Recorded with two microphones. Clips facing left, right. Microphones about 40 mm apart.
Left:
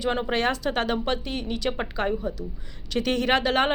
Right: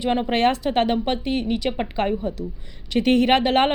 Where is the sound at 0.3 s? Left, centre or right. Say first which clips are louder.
Right 5 dB; right.